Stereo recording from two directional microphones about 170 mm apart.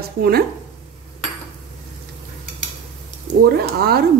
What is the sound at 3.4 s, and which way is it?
Speech, 65° right (ahead or behind).